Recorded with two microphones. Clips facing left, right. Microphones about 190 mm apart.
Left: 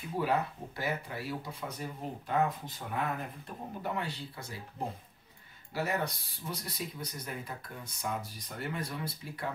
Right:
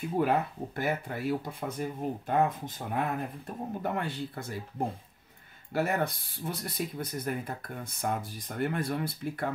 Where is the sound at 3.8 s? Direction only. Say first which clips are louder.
Right 3 dB; 50° right (ahead or behind).